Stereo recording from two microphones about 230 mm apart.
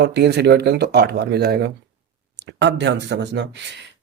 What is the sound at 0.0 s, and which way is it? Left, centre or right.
Speech, right.